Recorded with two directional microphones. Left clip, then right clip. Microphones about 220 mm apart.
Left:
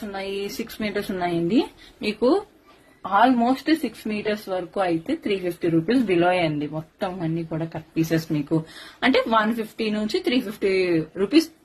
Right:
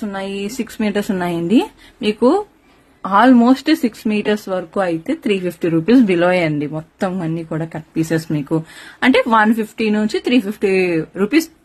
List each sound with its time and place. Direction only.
0.0 s speech: 50° right (ahead or behind)
3.0 s speech: 55° right (ahead or behind); by 11.5 s 35° right (ahead or behind)